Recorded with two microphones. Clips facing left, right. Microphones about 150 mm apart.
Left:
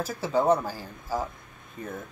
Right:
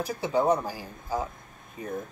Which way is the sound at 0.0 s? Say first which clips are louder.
Even; 15° right (ahead or behind).